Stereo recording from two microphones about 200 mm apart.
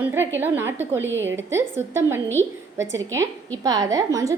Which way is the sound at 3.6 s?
20° right (ahead or behind).